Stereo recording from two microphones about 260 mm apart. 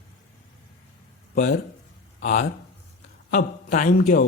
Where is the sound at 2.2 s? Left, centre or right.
Left.